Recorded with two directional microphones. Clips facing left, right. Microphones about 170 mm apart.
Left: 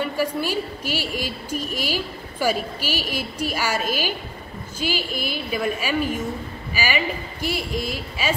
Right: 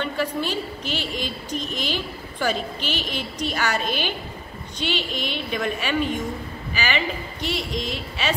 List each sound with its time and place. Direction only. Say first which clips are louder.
0.4 s a woman's voice: left 1 dB; 10° left (ahead or behind)